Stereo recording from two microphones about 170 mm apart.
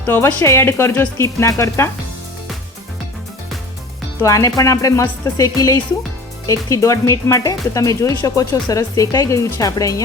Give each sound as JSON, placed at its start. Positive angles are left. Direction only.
{"t": 0.0, "sound": "speech", "side_deg": 10}
{"t": 4.2, "sound": "speech", "side_deg": 20}